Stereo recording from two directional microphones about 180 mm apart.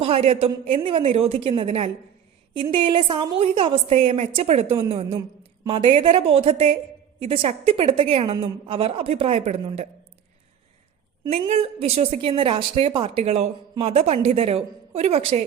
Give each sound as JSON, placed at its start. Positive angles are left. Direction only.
{"t": 0.0, "sound": "a woman's voice", "side_deg": -35}
{"t": 11.3, "sound": "a woman's voice", "side_deg": -30}